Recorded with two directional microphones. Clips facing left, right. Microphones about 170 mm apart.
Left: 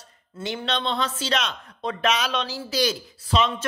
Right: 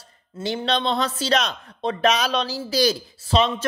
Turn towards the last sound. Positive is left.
turn(degrees=-30)  # may be behind; listen again after turning